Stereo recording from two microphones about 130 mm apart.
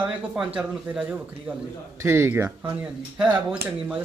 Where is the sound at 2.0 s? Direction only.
20° right (ahead or behind).